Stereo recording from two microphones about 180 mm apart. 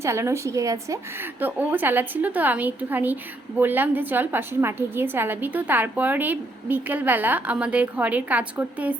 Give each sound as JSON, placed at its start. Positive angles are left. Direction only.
{"t": 0.0, "sound": "a woman's voice", "side_deg": -15}